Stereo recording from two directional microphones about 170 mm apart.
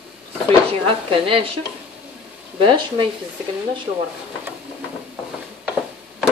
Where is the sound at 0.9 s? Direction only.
30° right (ahead or behind).